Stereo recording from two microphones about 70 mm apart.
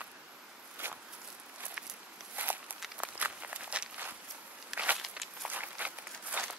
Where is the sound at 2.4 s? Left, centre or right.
Right.